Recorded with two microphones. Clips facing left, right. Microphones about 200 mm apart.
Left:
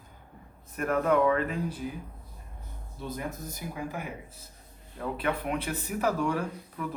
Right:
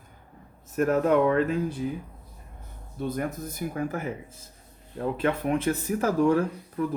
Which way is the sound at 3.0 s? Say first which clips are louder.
Right 6 dB; 55° right (ahead or behind).